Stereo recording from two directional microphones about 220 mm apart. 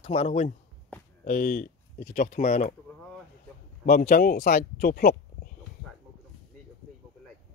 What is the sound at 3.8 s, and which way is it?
Speech, 40° left (ahead or behind).